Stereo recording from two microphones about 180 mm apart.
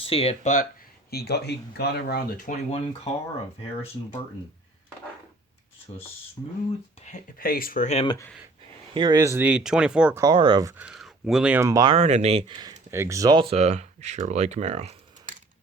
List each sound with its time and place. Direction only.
0.0 s speech: 30° left (ahead or behind)
1.1 s speech: 60° left (ahead or behind)
2.6 s speech: 35° left (ahead or behind)
7.0 s speech: 45° left (ahead or behind)
8.0 s speech: 20° left (ahead or behind)
8.9 s speech: 25° right (ahead or behind); by 10.2 s 5° right (ahead or behind)
10.2 s speech: 25° right (ahead or behind)
10.8 s speech: centre (ahead or behind); by 11.9 s 20° right (ahead or behind)
11.9 s speech: 35° right (ahead or behind)